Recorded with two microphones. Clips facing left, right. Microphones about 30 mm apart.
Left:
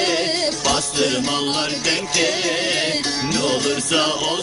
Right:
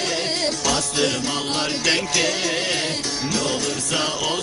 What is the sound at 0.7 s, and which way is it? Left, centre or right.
Music, centre.